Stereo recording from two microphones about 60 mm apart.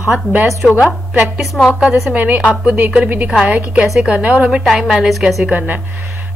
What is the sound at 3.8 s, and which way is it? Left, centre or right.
Speech, centre.